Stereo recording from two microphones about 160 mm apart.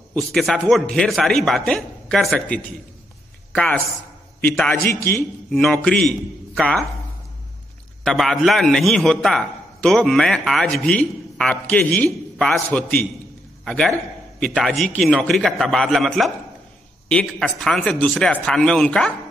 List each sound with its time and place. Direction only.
0.1 s a man's voice: centre (ahead or behind)
5.5 s a man's voice: centre (ahead or behind)
8.0 s a man's voice: centre (ahead or behind)